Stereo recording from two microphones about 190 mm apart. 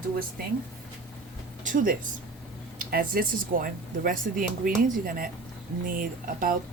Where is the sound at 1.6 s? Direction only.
45° right (ahead or behind).